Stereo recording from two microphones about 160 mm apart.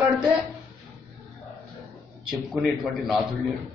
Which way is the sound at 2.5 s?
Centre (ahead or behind).